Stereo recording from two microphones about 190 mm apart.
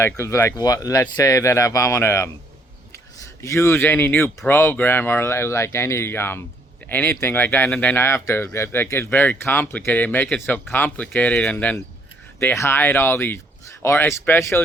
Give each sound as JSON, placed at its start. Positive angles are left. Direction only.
{"t": 0.0, "sound": "speech", "side_deg": 15}
{"t": 3.4, "sound": "speech", "side_deg": 15}